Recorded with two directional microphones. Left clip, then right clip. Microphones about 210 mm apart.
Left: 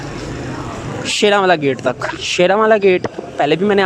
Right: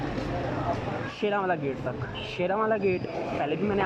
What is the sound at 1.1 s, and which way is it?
Speech, 40° left (ahead or behind).